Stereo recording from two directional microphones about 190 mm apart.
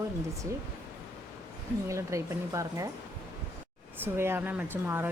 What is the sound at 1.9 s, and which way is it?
Speech, 15° right (ahead or behind).